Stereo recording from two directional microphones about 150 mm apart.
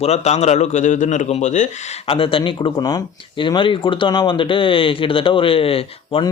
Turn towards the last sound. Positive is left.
turn(degrees=40)  # may be behind; listen again after turning